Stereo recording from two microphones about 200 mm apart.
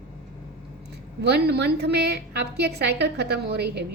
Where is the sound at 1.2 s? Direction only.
55° right (ahead or behind).